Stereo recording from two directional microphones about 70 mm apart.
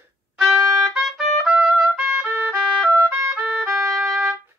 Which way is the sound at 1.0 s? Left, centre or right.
Centre.